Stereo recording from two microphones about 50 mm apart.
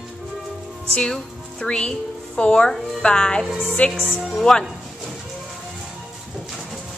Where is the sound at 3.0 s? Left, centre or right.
Centre.